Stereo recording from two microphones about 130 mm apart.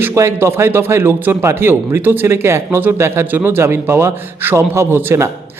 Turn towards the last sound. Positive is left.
turn(degrees=-20)  # may be behind; listen again after turning